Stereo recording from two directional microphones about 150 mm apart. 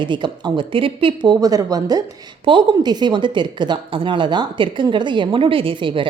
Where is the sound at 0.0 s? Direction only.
30° right (ahead or behind).